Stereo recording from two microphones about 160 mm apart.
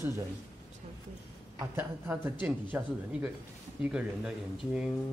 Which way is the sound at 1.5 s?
15° right (ahead or behind).